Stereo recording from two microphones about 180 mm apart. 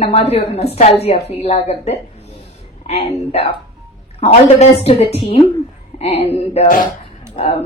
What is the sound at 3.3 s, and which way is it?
Speech, 30° left (ahead or behind).